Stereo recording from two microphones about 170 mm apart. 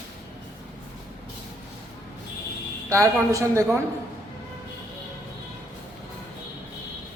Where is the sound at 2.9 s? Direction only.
20° right (ahead or behind).